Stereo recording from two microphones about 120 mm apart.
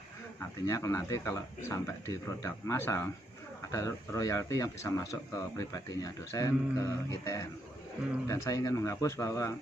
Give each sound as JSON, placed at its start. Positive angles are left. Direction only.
{"t": 0.4, "sound": "speech", "side_deg": 25}